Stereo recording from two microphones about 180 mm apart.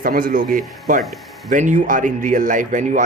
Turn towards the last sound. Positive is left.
turn(degrees=-45)  # may be behind; listen again after turning